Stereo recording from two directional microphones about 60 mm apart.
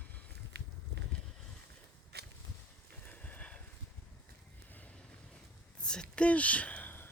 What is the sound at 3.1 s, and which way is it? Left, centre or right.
Horse, left.